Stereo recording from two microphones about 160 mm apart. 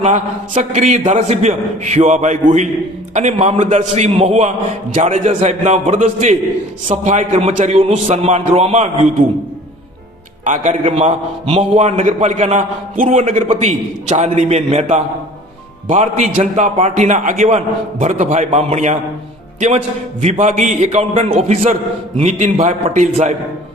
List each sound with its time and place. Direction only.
0.0 s a man's voice: 45° right (ahead or behind)
10.4 s a man's voice: 50° right (ahead or behind)